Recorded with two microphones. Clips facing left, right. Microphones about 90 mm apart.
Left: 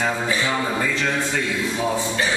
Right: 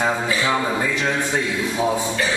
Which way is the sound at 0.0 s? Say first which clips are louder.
Right 2 dB; 20° right (ahead or behind).